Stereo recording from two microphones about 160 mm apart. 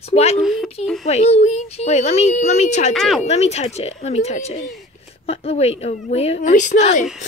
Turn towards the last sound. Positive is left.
turn(degrees=45)  # may be behind; listen again after turning